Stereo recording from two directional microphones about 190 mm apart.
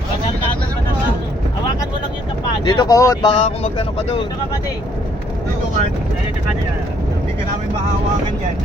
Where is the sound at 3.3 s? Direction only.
35° left (ahead or behind).